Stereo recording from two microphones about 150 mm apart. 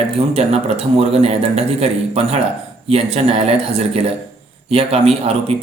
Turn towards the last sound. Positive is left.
turn(degrees=-40)  # may be behind; listen again after turning